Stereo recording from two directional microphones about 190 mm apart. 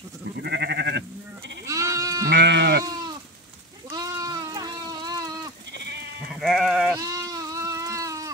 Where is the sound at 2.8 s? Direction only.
20° right (ahead or behind).